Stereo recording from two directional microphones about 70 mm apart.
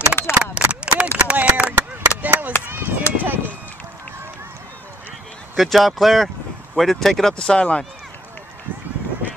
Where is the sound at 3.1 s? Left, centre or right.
Right.